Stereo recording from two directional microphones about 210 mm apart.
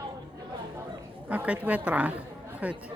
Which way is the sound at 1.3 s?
5° right (ahead or behind).